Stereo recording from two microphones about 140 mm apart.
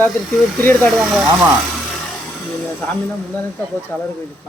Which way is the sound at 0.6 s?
15° left (ahead or behind).